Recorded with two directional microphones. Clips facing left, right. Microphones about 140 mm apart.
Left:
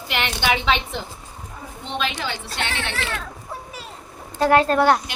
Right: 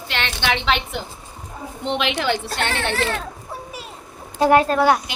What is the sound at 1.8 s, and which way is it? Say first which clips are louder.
Speech: right 5 dB; 70° right (ahead or behind).